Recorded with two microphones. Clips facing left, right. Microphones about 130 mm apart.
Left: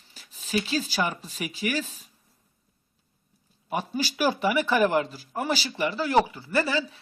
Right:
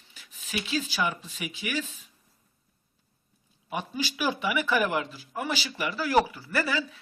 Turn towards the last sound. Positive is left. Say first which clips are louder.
# left 3 dB
turn(degrees=30)  # may be behind; listen again after turning